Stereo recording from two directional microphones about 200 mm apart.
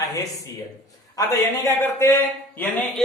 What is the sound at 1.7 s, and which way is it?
A man's voice, 10° left (ahead or behind).